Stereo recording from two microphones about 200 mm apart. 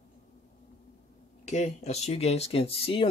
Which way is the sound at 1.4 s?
35° left (ahead or behind).